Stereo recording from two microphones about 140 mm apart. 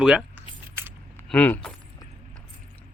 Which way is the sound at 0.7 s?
15° right (ahead or behind).